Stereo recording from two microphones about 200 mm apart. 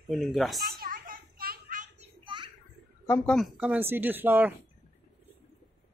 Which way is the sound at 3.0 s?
15° left (ahead or behind).